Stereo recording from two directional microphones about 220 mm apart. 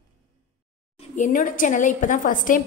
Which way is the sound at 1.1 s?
35° left (ahead or behind).